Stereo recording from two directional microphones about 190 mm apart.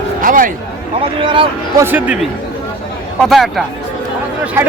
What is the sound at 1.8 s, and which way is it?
Speech, 10° right (ahead or behind).